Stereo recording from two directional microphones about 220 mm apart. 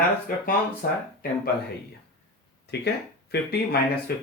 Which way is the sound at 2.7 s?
50° left (ahead or behind).